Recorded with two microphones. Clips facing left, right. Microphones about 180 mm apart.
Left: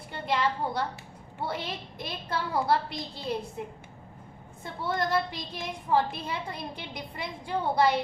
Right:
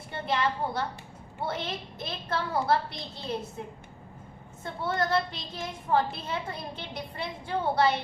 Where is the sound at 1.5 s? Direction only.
15° left (ahead or behind).